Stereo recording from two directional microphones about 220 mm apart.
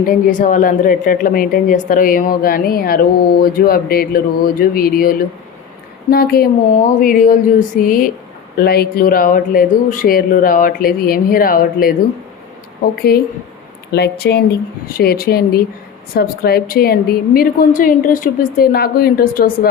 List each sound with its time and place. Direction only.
0.0 s a woman's voice: 40° left (ahead or behind)